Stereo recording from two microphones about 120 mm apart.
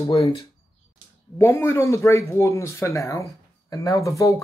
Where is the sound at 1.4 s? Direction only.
20° left (ahead or behind).